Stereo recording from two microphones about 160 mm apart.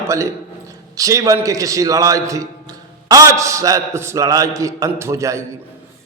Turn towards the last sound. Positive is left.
turn(degrees=-20)  # may be behind; listen again after turning